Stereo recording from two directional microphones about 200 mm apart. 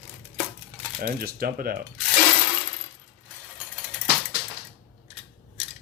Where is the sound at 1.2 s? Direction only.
50° right (ahead or behind).